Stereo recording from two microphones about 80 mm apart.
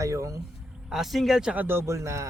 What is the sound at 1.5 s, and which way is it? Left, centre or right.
Speech, right.